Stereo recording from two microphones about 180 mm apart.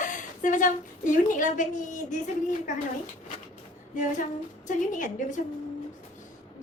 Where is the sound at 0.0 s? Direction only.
45° left (ahead or behind).